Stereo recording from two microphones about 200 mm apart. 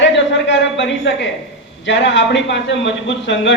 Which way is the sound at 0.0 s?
65° left (ahead or behind).